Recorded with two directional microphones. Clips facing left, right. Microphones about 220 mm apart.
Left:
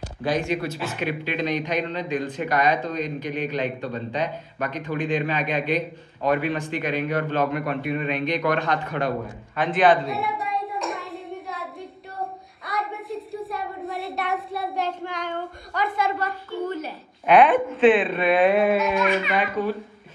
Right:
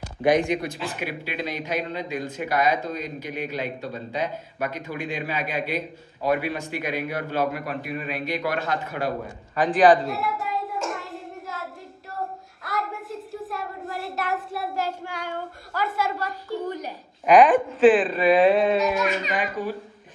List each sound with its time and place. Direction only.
0.2 s a man's voice: 20° right (ahead or behind)
9.6 s hands: centre (ahead or behind)
12.6 s a sound: centre (ahead or behind)
17.7 s speech: centre (ahead or behind)
18.5 s a sound: 30° right (ahead or behind)
19.3 s a man's voice: 15° right (ahead or behind)